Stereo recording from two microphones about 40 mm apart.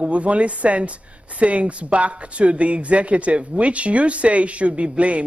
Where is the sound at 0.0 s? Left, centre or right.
Right.